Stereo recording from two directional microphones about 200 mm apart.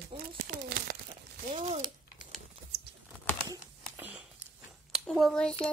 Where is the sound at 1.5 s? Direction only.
35° right (ahead or behind).